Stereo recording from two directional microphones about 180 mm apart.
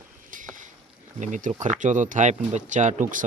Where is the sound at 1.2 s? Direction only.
45° right (ahead or behind).